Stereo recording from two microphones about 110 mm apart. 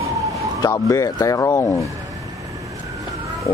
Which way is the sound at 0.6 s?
30° left (ahead or behind).